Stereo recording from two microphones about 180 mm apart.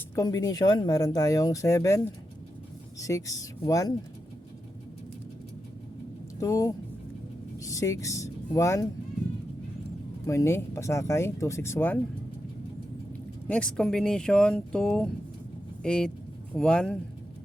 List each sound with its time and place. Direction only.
0.2 s speech: 20° left (ahead or behind)
3.0 s speech: 15° left (ahead or behind)
6.4 s speech: 15° left (ahead or behind)
10.2 s speech: 15° left (ahead or behind)
13.5 s speech: 5° left (ahead or behind)